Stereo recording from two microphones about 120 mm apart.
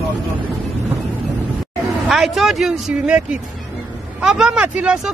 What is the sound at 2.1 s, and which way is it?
Speech, centre (ahead or behind).